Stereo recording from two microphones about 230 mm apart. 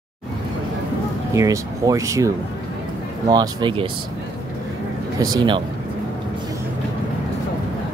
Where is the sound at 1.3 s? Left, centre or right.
Centre.